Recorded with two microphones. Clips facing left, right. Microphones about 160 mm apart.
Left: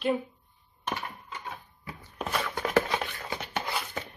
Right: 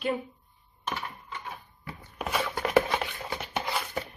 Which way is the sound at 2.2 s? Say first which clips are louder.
Right 1 dB; 5° right (ahead or behind).